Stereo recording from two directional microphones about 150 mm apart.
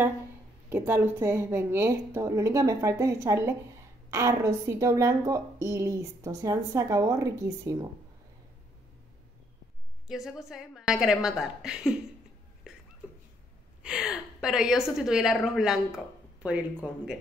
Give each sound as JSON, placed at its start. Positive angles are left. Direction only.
{"t": 0.7, "sound": "a woman's voice", "side_deg": -15}
{"t": 10.0, "sound": "a woman's voice", "side_deg": 0}
{"t": 13.8, "sound": "a woman's voice", "side_deg": -5}